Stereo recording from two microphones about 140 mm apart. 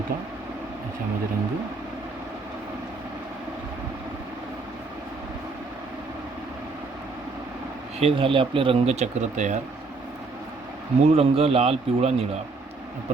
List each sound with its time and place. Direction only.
7.9 s speech: 45° right (ahead or behind); by 9.6 s 60° right (ahead or behind)
11.0 s speech: 45° right (ahead or behind)